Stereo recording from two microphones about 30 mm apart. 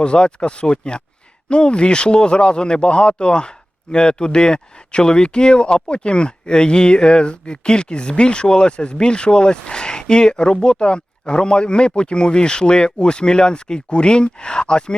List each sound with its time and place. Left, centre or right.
0.0 s speech: left